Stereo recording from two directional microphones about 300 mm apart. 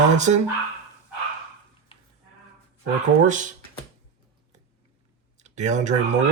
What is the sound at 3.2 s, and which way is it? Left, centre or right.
Speech, right.